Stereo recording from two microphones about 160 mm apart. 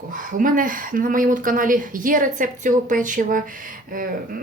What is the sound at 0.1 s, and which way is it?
A man's voice, 60° right (ahead or behind).